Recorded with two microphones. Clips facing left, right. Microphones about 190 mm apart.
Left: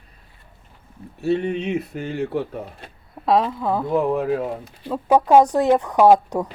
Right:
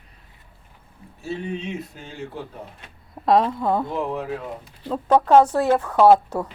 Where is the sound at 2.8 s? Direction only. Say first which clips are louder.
Left 5 dB; 35° left (ahead or behind).